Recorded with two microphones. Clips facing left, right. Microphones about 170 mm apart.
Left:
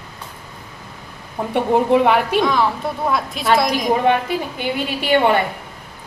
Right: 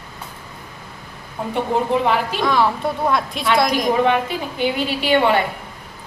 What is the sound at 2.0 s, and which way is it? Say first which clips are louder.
Speech: left 3 dB; 60° left (ahead or behind).